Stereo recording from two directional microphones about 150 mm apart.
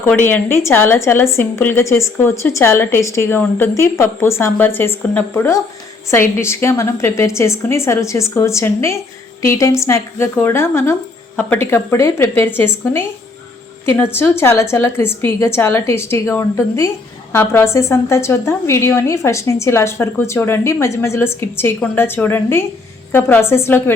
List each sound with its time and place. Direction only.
0.0 s a woman's voice: 15° left (ahead or behind)